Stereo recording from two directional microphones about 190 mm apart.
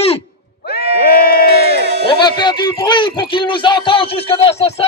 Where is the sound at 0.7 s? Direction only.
55° left (ahead or behind).